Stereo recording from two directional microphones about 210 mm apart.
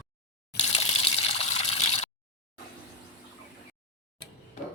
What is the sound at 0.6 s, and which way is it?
Water, 30° left (ahead or behind).